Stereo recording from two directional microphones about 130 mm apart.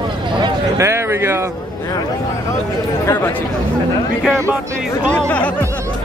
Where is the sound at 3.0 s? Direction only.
15° left (ahead or behind).